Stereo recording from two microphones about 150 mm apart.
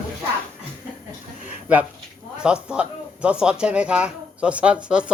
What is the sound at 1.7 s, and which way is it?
Speech, 10° right (ahead or behind).